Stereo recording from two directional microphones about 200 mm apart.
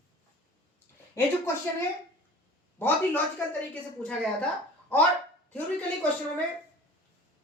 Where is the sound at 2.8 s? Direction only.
10° left (ahead or behind).